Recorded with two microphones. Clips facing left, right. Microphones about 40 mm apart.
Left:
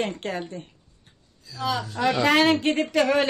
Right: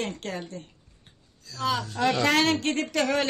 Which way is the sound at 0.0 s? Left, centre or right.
Centre.